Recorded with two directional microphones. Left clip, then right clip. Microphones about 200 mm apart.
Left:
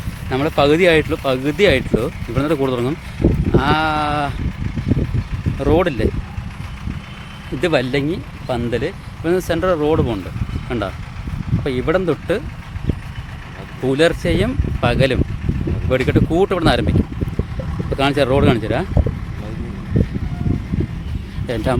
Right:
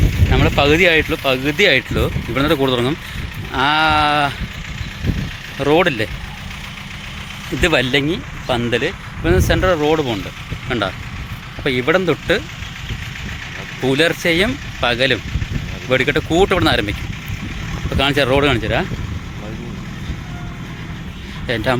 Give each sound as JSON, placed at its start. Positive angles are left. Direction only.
{"t": 0.3, "sound": "speech", "side_deg": 10}
{"t": 5.5, "sound": "speech", "side_deg": 0}
{"t": 7.6, "sound": "speech", "side_deg": -5}
{"t": 13.8, "sound": "speech", "side_deg": 0}
{"t": 17.9, "sound": "speech", "side_deg": 5}
{"t": 21.4, "sound": "speech", "side_deg": 10}